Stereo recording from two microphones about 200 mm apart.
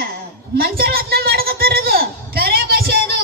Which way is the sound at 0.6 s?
50° right (ahead or behind).